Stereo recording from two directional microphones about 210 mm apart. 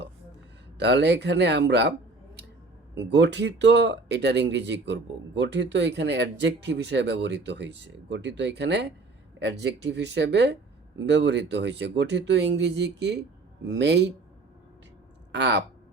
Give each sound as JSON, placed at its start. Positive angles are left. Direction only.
{"t": 0.8, "sound": "speech", "side_deg": -55}
{"t": 15.3, "sound": "speech", "side_deg": -55}